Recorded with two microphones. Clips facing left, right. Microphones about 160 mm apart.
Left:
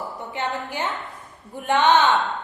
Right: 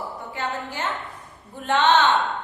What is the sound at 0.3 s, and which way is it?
A woman's voice, 15° left (ahead or behind).